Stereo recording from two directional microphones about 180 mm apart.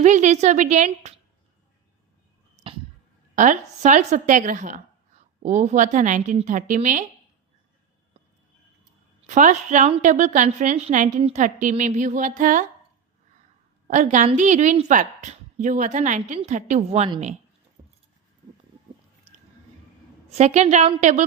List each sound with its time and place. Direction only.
0.0 s a woman's voice: 40° right (ahead or behind)
2.6 s a sound: 35° right (ahead or behind)
3.3 s a woman's voice: 45° right (ahead or behind)
9.2 s a woman's voice: 45° right (ahead or behind)
13.8 s a woman's voice: 45° right (ahead or behind)
17.8 s keys jangling: 20° right (ahead or behind)
20.3 s a woman's voice: 40° right (ahead or behind)